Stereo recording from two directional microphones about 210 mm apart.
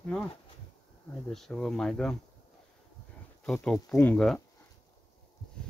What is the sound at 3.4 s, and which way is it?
Speech, 5° left (ahead or behind).